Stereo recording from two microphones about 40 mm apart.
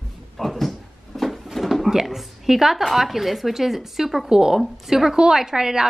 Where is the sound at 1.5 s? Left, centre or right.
Centre.